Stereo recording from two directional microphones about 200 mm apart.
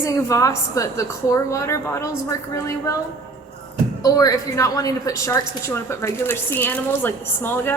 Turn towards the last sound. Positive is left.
turn(degrees=10)  # may be behind; listen again after turning